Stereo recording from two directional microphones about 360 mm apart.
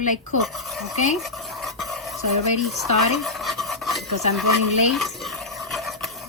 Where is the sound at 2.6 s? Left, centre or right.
Centre.